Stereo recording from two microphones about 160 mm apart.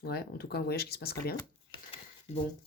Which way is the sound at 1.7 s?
35° left (ahead or behind).